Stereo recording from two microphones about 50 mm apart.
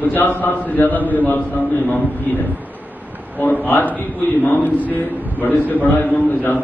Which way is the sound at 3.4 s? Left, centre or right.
Left.